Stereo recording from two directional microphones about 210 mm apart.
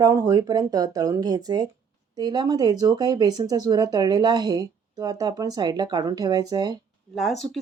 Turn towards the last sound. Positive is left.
turn(degrees=0)  # may be behind; listen again after turning